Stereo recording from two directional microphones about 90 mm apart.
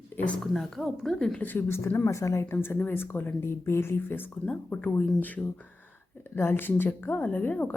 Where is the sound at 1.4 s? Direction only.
20° left (ahead or behind).